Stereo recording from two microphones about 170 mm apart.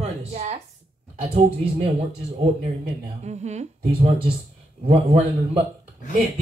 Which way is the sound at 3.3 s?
40° right (ahead or behind).